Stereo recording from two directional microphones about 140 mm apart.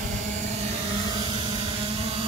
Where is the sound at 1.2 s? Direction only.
35° right (ahead or behind).